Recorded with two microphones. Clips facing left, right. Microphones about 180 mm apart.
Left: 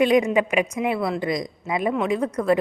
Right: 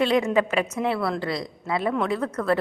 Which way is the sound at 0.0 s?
15° left (ahead or behind).